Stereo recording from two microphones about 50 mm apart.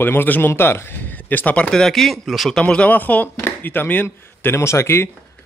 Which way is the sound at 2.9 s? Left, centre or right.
Left.